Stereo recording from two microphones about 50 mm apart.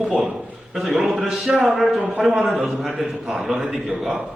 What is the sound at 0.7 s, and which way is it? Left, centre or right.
A man's voice, centre.